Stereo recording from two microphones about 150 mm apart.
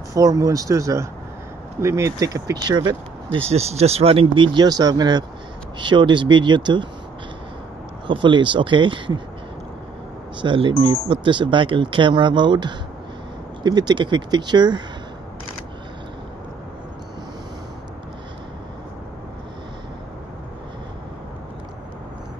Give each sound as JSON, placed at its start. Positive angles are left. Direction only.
{"t": 0.1, "sound": "speech", "side_deg": -25}
{"t": 3.3, "sound": "speech", "side_deg": -45}
{"t": 8.1, "sound": "speech", "side_deg": -35}
{"t": 10.4, "sound": "speech", "side_deg": -35}